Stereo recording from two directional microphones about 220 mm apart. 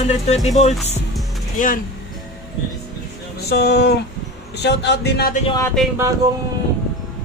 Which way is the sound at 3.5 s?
50° left (ahead or behind).